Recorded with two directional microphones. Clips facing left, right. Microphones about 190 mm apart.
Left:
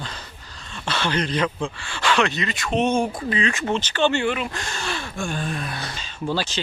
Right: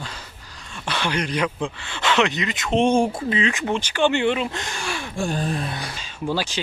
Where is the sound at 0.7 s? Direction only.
15° right (ahead or behind).